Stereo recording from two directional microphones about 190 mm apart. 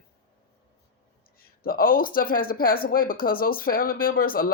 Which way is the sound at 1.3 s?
50° left (ahead or behind).